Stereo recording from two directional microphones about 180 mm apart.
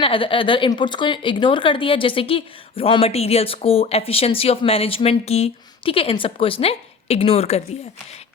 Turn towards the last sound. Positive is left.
turn(degrees=30)  # may be behind; listen again after turning